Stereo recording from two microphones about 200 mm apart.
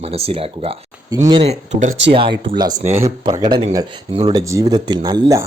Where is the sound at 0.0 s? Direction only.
30° right (ahead or behind).